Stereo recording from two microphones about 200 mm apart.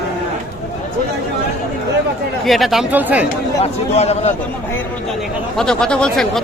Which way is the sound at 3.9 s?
30° left (ahead or behind).